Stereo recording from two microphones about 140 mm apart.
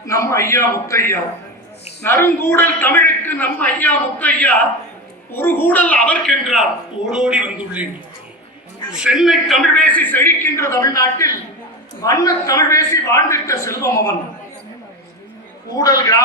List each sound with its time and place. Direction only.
0.0 s a man's voice: 20° left (ahead or behind); by 7.9 s 10° right (ahead or behind)
9.0 s a man's voice: 5° right (ahead or behind); by 14.2 s 20° left (ahead or behind)
15.7 s a man's voice: 25° left (ahead or behind)